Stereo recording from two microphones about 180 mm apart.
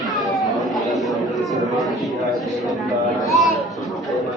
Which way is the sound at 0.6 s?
Centre (ahead or behind).